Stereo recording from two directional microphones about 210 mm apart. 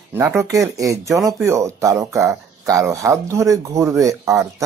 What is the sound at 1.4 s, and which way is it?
Speech, 15° right (ahead or behind).